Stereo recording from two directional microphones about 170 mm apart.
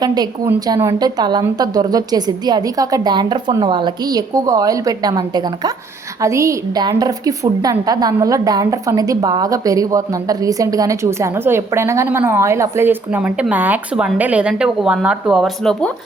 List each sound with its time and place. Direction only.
0.0 s a woman's voice: 25° right (ahead or behind); by 15.9 s centre (ahead or behind)